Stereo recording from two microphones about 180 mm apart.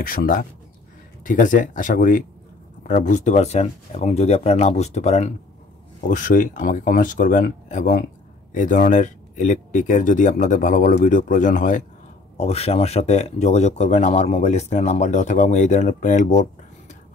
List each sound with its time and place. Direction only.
0.0 s speech: 55° left (ahead or behind)